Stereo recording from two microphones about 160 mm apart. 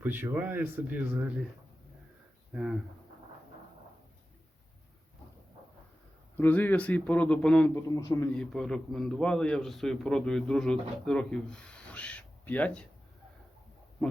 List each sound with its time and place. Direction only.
0.0 s speech: 10° right (ahead or behind)
2.5 s speech: 5° right (ahead or behind)
6.3 s speech: 10° left (ahead or behind)
7.8 s a man's voice: 20° left (ahead or behind)
8.3 s a man's voice: 5° left (ahead or behind)